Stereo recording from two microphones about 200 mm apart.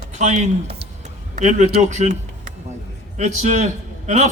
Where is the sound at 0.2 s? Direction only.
35° right (ahead or behind).